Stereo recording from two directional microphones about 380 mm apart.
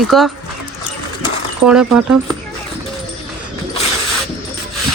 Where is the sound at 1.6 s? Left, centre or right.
Centre.